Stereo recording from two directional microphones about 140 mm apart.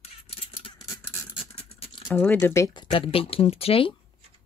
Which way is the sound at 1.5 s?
45° left (ahead or behind).